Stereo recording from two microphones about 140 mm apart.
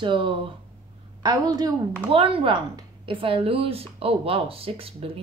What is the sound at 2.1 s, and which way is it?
A woman's voice, 40° right (ahead or behind).